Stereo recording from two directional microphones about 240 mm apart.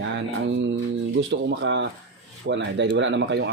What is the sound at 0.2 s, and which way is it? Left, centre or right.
Music, right.